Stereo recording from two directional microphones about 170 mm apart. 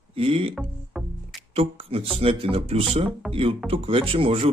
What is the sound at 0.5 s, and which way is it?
Music, centre (ahead or behind).